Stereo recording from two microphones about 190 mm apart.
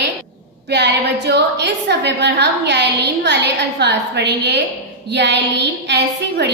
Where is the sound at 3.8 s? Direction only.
65° right (ahead or behind).